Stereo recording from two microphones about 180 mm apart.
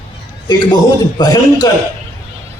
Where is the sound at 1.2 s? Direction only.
20° left (ahead or behind).